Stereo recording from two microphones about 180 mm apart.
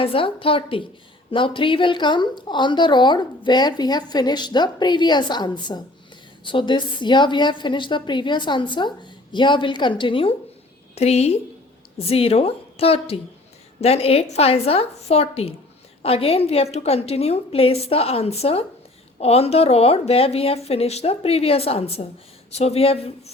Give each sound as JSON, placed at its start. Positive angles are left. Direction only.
{"t": 0.0, "sound": "a woman's voice", "side_deg": 30}